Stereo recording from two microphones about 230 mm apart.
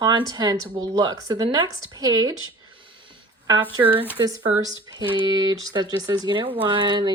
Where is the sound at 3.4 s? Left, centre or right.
Centre.